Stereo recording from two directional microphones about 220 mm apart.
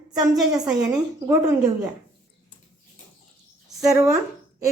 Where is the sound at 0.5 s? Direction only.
15° right (ahead or behind).